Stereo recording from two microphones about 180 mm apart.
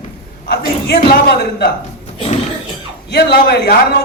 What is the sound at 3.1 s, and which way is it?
Speech, 65° left (ahead or behind).